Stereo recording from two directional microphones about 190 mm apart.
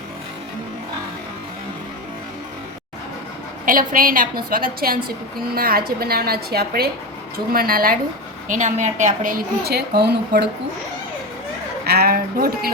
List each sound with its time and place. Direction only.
3.7 s a woman's voice: 45° right (ahead or behind)
8.4 s a woman's voice: 40° right (ahead or behind); by 10.5 s 55° right (ahead or behind)
11.9 s a woman's voice: 55° right (ahead or behind)